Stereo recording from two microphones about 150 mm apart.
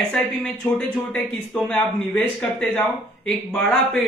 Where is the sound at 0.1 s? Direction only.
5° left (ahead or behind).